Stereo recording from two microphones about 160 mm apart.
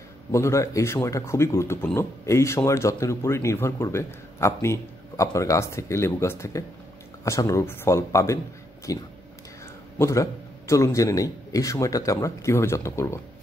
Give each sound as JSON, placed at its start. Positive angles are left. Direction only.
{"t": 0.3, "sound": "a man's voice", "side_deg": 20}